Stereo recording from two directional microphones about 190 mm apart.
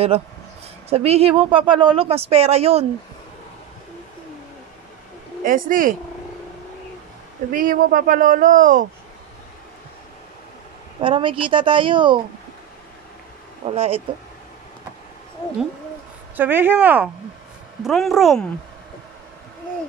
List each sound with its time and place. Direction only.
0.8 s speech: 30° right (ahead or behind)
5.4 s speech: 45° right (ahead or behind)
7.5 s speech: 45° right (ahead or behind)
11.0 s a woman's voice: 25° right (ahead or behind)
13.7 s speech: 30° right (ahead or behind)
16.3 s speech: 10° right (ahead or behind)